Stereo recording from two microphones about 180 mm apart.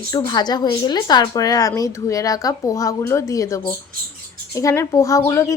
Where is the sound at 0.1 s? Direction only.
25° left (ahead or behind).